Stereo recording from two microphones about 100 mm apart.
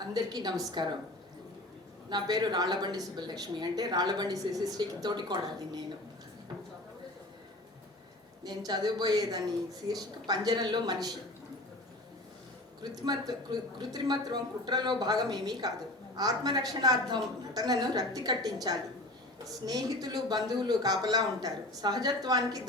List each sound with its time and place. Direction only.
0.1 s a woman's voice: 45° right (ahead or behind)
2.0 s a woman's voice: 45° right (ahead or behind)
8.4 s a woman's voice: 45° right (ahead or behind)
12.8 s a woman's voice: 45° right (ahead or behind)